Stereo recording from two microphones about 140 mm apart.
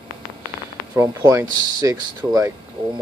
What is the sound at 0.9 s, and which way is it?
Speech, 20° right (ahead or behind).